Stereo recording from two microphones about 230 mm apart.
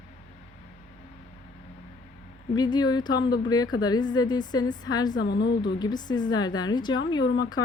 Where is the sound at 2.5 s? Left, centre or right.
Centre.